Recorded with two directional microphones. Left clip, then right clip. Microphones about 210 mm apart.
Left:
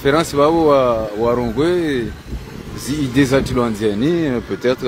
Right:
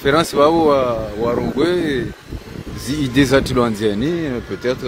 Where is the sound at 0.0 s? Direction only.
Centre (ahead or behind).